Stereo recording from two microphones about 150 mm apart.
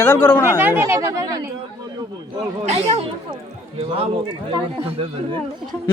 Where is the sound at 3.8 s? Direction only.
35° right (ahead or behind).